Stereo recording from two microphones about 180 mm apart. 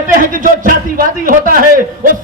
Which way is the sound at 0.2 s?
50° right (ahead or behind).